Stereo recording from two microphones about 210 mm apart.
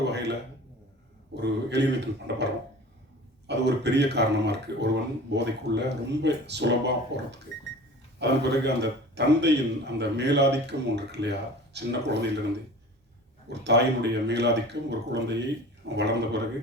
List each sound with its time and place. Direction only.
0.0 s a sound: 55° right (ahead or behind)
1.4 s a man's voice: 55° right (ahead or behind)
13.5 s speech: 55° right (ahead or behind)